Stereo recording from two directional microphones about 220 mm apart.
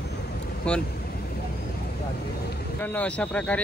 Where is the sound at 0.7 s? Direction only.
5° left (ahead or behind).